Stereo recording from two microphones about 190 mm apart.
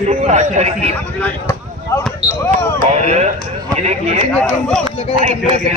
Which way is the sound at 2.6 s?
15° left (ahead or behind).